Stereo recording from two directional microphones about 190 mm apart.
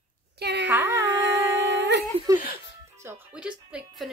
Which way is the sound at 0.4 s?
60° right (ahead or behind).